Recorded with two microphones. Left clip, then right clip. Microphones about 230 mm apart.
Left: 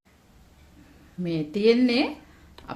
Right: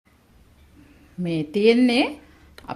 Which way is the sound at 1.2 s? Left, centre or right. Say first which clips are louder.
Right 3 dB; centre.